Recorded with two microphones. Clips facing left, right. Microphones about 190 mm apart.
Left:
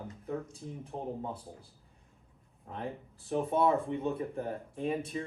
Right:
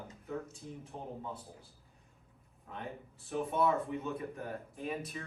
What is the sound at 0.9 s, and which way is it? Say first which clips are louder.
Speech: left 7 dB; 40° left (ahead or behind).